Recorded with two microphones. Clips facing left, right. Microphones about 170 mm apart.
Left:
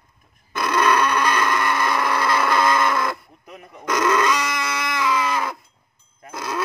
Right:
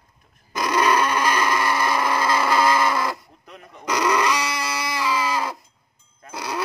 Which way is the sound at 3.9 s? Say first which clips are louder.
Left 1 dB; 15° right (ahead or behind).